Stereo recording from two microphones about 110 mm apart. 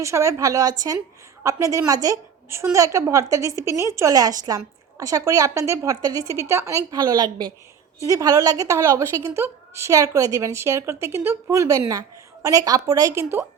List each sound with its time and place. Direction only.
0.0 s a woman's voice: 30° right (ahead or behind)